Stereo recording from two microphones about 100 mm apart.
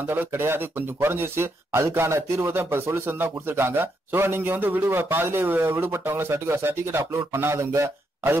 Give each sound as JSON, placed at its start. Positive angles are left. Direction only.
{"t": 0.1, "sound": "speech", "side_deg": -25}